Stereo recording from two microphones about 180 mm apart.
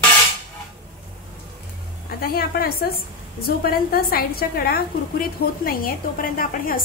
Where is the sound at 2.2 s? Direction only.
55° left (ahead or behind).